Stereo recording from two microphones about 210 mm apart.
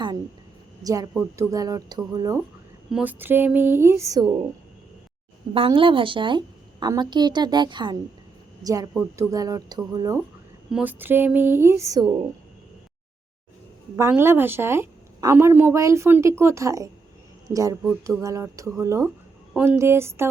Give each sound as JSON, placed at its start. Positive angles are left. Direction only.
{"t": 0.8, "sound": "a woman's voice", "side_deg": -15}
{"t": 5.5, "sound": "a woman's voice", "side_deg": -25}
{"t": 10.7, "sound": "a woman's voice", "side_deg": -5}
{"t": 13.9, "sound": "a woman's voice", "side_deg": -10}